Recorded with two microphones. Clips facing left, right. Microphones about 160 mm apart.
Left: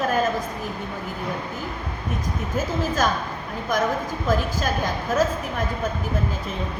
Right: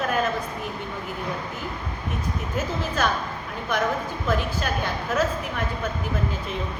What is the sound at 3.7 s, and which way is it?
A woman's voice, 40° left (ahead or behind).